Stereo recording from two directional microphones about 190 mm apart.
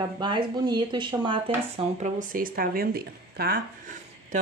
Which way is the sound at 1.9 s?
40° right (ahead or behind).